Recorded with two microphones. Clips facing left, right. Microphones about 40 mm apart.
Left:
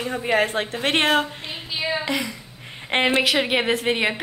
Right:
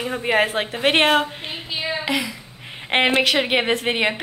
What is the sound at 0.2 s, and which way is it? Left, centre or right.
Speech, right.